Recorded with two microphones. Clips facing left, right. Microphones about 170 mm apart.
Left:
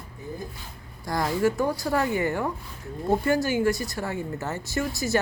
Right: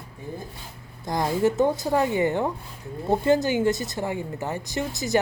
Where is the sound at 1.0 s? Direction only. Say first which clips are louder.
Right 1 dB; 20° right (ahead or behind).